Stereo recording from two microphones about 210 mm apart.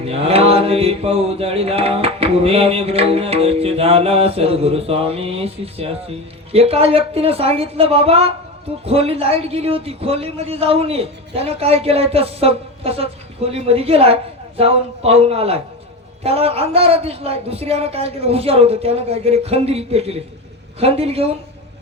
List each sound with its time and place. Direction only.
0.0 s mantra: 30° right (ahead or behind)